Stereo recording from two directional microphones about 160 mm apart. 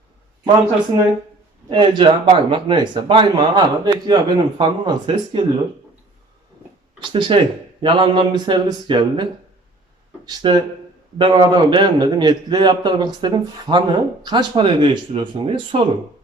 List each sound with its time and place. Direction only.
0.9 s a man's voice: 20° right (ahead or behind)
7.0 s a man's voice: 30° right (ahead or behind)
10.2 s a man's voice: 25° right (ahead or behind)